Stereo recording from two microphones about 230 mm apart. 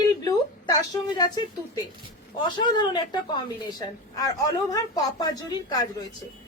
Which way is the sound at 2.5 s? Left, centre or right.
Centre.